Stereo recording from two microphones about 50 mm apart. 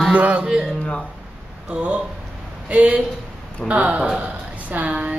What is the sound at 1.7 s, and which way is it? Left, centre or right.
Speech, right.